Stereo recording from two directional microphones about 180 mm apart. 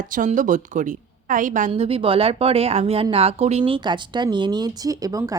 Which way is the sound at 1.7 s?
30° right (ahead or behind).